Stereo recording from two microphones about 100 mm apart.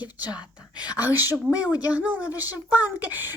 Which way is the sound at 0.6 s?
45° left (ahead or behind).